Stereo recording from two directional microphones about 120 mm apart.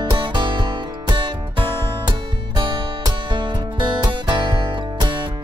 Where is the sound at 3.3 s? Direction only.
40° right (ahead or behind).